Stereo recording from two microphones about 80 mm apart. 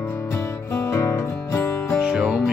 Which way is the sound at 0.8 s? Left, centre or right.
Left.